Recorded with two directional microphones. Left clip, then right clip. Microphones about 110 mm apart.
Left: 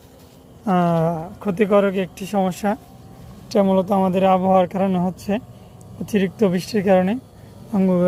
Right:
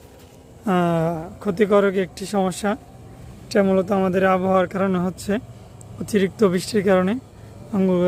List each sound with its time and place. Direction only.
0.6 s a man's voice: 25° right (ahead or behind)
2.1 s speech: 5° right (ahead or behind)